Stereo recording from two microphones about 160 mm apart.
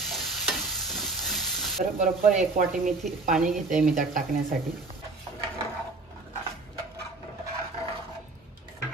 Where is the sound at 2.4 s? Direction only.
50° right (ahead or behind).